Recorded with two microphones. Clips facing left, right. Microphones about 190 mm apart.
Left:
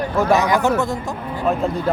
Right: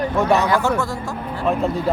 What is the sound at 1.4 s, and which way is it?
Speech, centre (ahead or behind).